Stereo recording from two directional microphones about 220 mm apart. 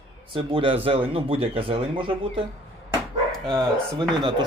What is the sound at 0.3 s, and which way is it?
Speech, 25° right (ahead or behind).